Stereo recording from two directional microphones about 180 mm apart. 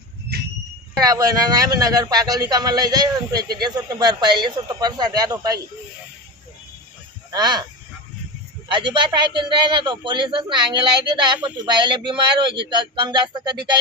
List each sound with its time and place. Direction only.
0.9 s a man's voice: 20° right (ahead or behind)
7.3 s speech: 25° right (ahead or behind)
8.7 s a man's voice: 25° right (ahead or behind)